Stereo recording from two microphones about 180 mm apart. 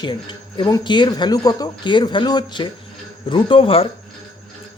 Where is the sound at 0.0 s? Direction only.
25° left (ahead or behind).